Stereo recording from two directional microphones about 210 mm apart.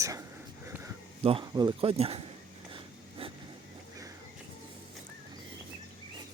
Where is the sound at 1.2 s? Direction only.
25° right (ahead or behind).